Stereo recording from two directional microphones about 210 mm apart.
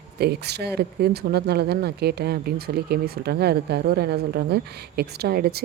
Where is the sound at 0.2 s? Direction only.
50° right (ahead or behind).